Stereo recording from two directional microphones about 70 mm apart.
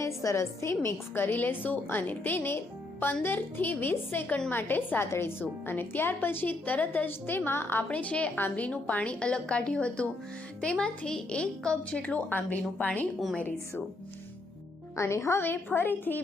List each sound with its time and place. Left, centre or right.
0.0 s a woman's voice: left
7.9 s a woman's voice: centre
14.9 s a woman's voice: left
15.4 s a woman's voice: left